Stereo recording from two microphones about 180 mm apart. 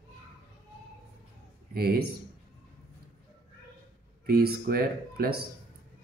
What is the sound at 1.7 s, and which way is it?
Speech, 60° right (ahead or behind).